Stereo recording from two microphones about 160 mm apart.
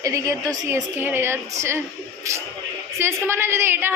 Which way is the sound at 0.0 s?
20° right (ahead or behind).